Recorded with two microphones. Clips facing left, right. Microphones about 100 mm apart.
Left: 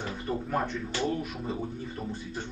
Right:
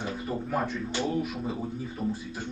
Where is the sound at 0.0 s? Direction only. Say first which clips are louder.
Right 1 dB; 5° right (ahead or behind).